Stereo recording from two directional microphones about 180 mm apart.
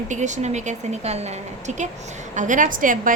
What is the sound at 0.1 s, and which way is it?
A woman's voice, 40° right (ahead or behind).